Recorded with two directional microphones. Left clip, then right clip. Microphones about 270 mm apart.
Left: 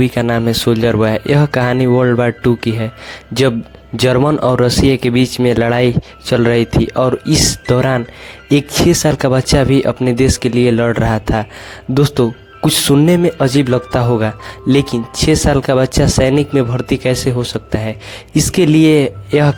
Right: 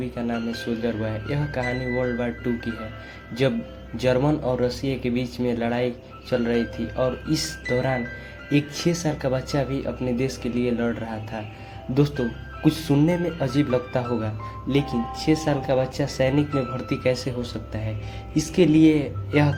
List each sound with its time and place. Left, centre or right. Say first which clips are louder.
0.0 s speech: left 14 dB; left
3.9 s speech: left 9 dB; left